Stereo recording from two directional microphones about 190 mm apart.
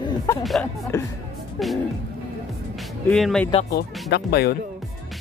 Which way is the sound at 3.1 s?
5° left (ahead or behind).